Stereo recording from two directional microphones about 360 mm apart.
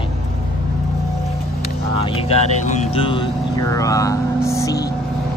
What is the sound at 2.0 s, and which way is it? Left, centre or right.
Speech, centre.